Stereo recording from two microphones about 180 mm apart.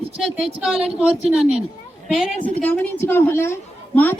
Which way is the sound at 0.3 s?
30° right (ahead or behind).